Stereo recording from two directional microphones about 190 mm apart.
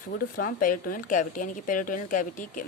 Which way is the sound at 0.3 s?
45° left (ahead or behind).